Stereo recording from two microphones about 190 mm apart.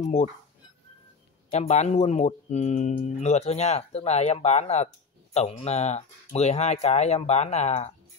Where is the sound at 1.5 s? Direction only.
35° left (ahead or behind).